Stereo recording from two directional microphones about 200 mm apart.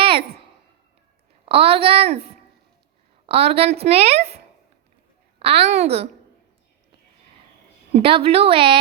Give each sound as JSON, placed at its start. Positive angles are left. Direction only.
{"t": 0.0, "sound": "a sound", "side_deg": -25}
{"t": 1.5, "sound": "a woman's voice", "side_deg": -30}
{"t": 3.2, "sound": "a woman's voice", "side_deg": -30}
{"t": 5.4, "sound": "a woman's voice", "side_deg": -30}
{"t": 7.9, "sound": "a woman's voice", "side_deg": -30}